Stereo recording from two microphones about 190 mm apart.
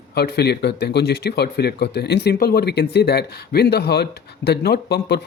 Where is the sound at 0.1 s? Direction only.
60° left (ahead or behind).